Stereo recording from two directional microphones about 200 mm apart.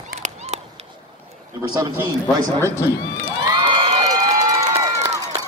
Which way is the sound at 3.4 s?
25° right (ahead or behind).